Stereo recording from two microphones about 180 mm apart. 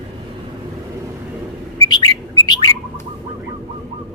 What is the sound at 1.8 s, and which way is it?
Bird, 20° left (ahead or behind).